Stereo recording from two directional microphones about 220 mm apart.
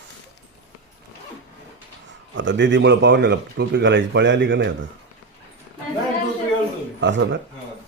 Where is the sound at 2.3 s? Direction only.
55° right (ahead or behind).